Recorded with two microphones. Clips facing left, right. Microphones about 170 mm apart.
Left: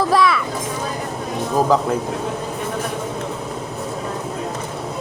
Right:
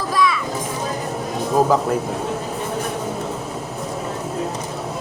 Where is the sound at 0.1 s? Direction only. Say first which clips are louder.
Left 3 dB; 65° left (ahead or behind).